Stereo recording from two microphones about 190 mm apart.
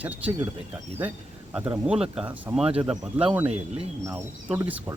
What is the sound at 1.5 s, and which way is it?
Speech, 10° right (ahead or behind).